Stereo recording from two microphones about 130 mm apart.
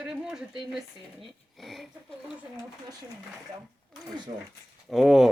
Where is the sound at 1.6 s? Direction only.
Centre (ahead or behind).